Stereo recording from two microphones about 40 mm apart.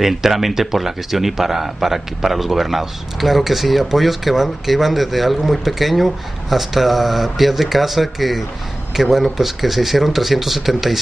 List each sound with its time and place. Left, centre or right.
0.0 s speech: centre